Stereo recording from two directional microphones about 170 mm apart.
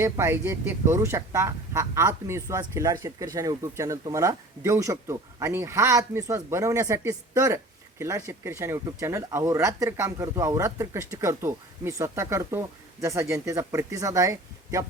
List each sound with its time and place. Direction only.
0.0 s speech: 15° right (ahead or behind)